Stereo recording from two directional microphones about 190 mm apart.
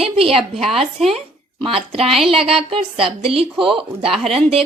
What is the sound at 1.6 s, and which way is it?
Speech, 30° right (ahead or behind).